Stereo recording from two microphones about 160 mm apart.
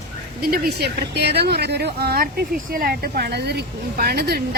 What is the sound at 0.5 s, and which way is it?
A woman's voice, 80° right.